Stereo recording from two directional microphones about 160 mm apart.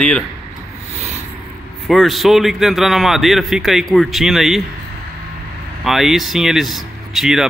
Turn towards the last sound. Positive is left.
turn(degrees=0)  # may be behind; listen again after turning